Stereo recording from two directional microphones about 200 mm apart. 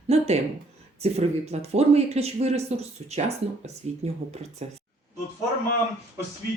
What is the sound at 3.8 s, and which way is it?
Speech, 30° right (ahead or behind).